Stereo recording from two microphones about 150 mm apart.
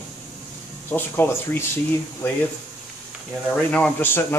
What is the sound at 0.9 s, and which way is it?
Speech, 15° left (ahead or behind).